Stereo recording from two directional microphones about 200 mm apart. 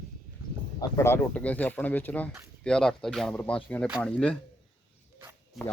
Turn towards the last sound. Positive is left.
turn(degrees=0)  # may be behind; listen again after turning